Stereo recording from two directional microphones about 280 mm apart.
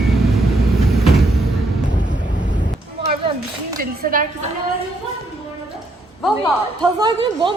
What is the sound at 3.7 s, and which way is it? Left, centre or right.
Speech, right.